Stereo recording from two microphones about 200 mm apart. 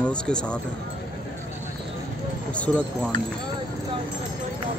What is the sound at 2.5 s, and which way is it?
Speech, 5° left (ahead or behind).